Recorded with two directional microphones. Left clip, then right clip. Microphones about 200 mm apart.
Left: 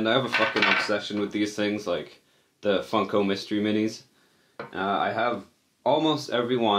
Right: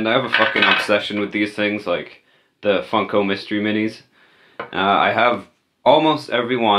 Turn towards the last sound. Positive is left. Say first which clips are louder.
# right 6 dB
turn(degrees=-25)  # may be behind; listen again after turning